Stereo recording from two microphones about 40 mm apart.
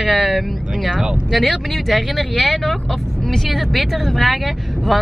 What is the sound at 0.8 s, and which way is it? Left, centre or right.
Speech, centre.